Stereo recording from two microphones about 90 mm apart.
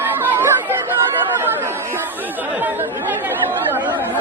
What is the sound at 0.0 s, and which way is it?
Chatter, 25° right (ahead or behind).